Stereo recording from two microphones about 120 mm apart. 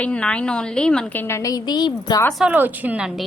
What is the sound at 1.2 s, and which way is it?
A woman's voice, 25° left (ahead or behind).